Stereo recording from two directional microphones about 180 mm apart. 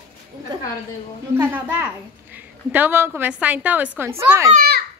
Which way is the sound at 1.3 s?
10° right (ahead or behind).